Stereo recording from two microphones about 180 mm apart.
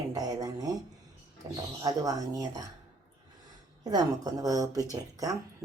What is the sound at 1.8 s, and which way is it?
Speech, 20° right (ahead or behind).